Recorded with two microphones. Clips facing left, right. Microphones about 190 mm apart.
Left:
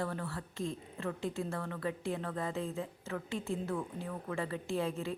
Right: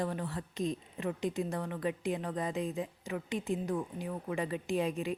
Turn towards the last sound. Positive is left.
turn(degrees=-15)  # may be behind; listen again after turning